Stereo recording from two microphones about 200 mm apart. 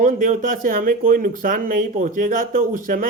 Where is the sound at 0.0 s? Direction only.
40° right (ahead or behind).